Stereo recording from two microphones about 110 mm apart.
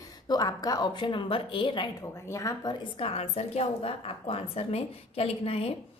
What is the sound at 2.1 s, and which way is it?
Speech, 25° left (ahead or behind).